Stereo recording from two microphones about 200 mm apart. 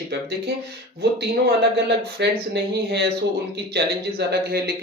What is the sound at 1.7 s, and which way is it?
A man's voice, 55° right (ahead or behind).